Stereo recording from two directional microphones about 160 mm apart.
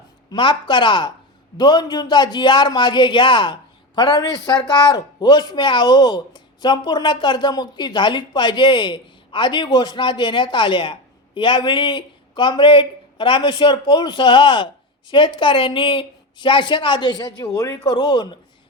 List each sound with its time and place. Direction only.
0.3 s a man's voice: 30° left (ahead or behind)